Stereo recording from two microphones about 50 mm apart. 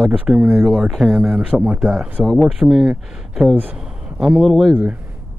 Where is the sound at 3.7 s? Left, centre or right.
Centre.